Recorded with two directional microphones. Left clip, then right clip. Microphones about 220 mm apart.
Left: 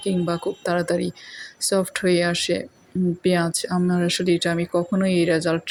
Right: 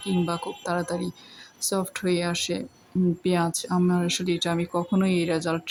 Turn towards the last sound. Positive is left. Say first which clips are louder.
# left 6 dB
turn(degrees=10)  # may be behind; listen again after turning